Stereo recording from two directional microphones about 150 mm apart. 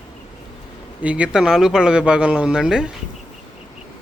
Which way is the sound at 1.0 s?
10° right (ahead or behind).